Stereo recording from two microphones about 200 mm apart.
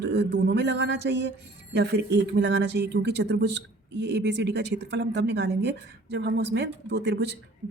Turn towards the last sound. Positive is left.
turn(degrees=-60)  # may be behind; listen again after turning